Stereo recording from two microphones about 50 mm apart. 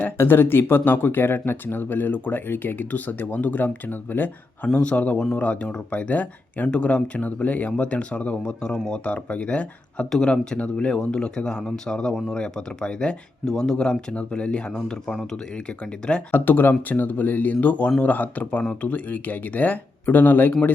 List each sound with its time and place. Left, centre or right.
0.2 s speech: left
4.6 s speech: left
9.0 s speech: left
15.1 s speech: centre
15.5 s speech: left
16.3 s speech: left